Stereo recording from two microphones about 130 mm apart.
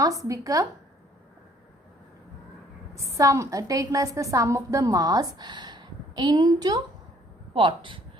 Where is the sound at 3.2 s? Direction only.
25° right (ahead or behind).